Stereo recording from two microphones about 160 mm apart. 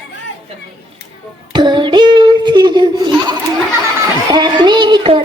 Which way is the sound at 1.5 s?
30° right (ahead or behind).